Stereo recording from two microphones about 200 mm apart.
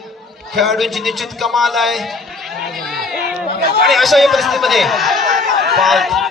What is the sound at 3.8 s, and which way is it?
A man's voice, centre (ahead or behind).